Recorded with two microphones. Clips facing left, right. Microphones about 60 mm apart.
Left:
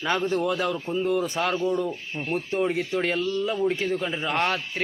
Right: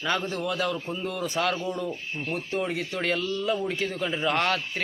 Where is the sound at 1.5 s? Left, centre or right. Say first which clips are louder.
Left 5 dB; centre.